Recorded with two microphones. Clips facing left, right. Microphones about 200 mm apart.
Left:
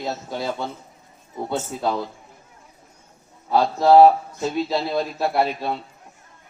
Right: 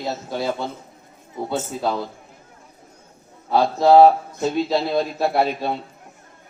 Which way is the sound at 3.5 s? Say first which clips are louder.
Right 1 dB; 15° right (ahead or behind).